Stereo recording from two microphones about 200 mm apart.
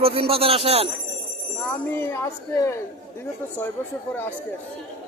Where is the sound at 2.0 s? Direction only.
15° left (ahead or behind).